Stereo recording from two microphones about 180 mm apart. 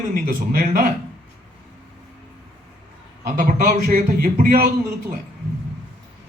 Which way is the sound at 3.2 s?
50° right (ahead or behind).